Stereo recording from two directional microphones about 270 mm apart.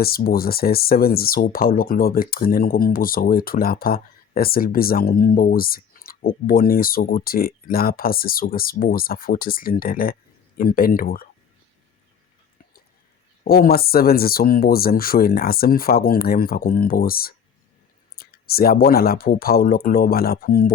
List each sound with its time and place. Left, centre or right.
0.0 s speech: left
13.4 s speech: left